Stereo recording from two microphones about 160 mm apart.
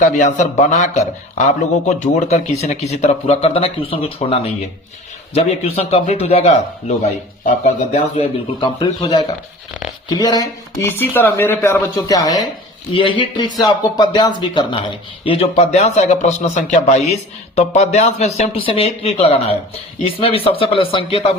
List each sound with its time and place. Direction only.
0.0 s a man's voice: 50° left (ahead or behind)
8.6 s speech: 30° left (ahead or behind)